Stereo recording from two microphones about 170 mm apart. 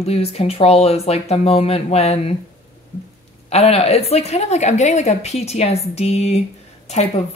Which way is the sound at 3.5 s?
35° left (ahead or behind).